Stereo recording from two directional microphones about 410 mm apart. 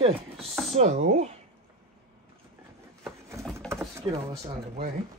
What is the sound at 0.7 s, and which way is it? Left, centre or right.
Speech, centre.